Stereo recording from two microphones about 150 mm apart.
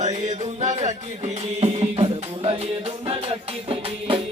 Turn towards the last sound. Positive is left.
turn(degrees=-35)  # may be behind; listen again after turning